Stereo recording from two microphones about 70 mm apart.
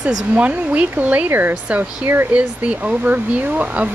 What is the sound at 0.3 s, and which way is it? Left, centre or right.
Speech, centre.